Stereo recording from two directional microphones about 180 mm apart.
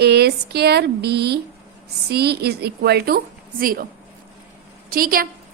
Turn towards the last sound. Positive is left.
turn(degrees=-50)  # may be behind; listen again after turning